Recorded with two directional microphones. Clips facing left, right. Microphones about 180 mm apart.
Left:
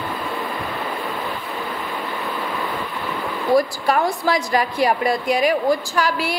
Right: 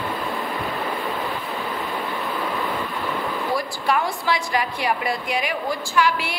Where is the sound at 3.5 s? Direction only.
40° left (ahead or behind).